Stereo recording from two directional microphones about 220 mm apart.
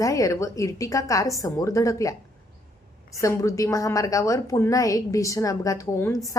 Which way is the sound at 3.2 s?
15° left (ahead or behind).